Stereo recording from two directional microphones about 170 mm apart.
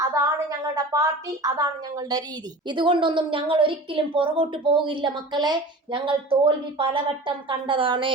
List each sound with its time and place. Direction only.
0.0 s a woman's voice: 20° right (ahead or behind)